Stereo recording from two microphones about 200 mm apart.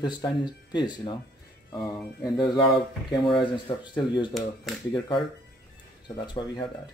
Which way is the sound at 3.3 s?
25° left (ahead or behind).